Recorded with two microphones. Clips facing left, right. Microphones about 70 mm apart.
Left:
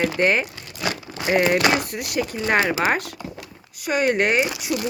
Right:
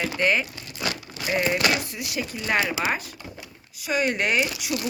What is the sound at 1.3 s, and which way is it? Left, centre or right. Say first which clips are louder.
Speech: left 5 dB; left.